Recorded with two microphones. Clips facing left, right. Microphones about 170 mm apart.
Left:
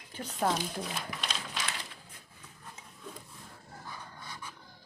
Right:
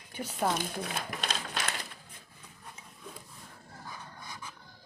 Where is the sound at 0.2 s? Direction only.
5° right (ahead or behind).